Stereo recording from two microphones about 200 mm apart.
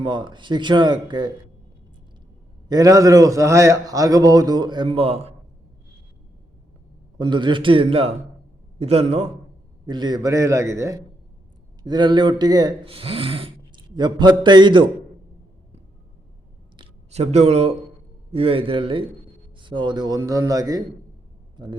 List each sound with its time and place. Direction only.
0.0 s speech: 25° right (ahead or behind)
2.6 s a man's voice: 20° right (ahead or behind)
7.2 s a man's voice: 25° right (ahead or behind)
16.7 s a sound: 30° right (ahead or behind)
18.3 s speech: 30° right (ahead or behind)
21.5 s a sound: 20° right (ahead or behind)